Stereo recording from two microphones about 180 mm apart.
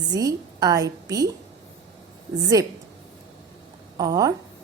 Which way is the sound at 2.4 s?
20° right (ahead or behind).